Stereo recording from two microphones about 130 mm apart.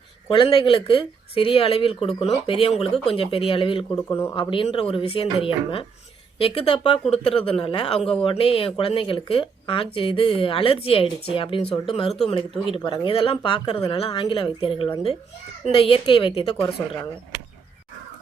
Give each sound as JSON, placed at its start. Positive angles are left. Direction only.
{"t": 0.3, "sound": "speech", "side_deg": 40}
{"t": 3.9, "sound": "a man's voice", "side_deg": 20}
{"t": 4.4, "sound": "speech", "side_deg": 40}